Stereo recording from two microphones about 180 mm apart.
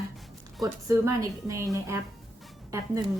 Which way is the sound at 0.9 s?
15° right (ahead or behind).